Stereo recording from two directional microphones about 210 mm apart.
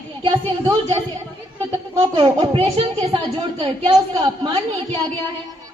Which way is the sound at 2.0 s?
20° right (ahead or behind).